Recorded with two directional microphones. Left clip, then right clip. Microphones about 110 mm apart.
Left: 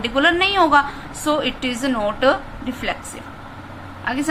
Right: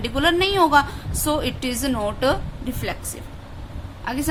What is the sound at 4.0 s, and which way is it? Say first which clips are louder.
Speech: left 4 dB; 40° right (ahead or behind).